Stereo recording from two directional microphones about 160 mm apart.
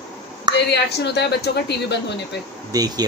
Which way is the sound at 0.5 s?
90° left.